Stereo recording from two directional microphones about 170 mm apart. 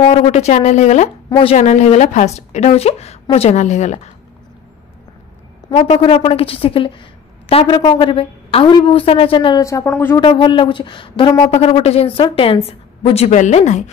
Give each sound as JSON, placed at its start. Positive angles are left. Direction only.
{"t": 0.0, "sound": "a woman's voice", "side_deg": 35}
{"t": 1.6, "sound": "a woman's voice", "side_deg": 45}
{"t": 5.7, "sound": "a woman's voice", "side_deg": 35}
{"t": 10.2, "sound": "a woman's voice", "side_deg": 30}